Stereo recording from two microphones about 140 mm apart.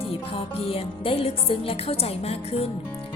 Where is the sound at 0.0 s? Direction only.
45° left (ahead or behind).